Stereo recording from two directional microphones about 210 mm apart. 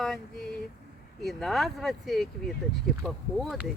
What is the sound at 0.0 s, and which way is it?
Speech, centre (ahead or behind).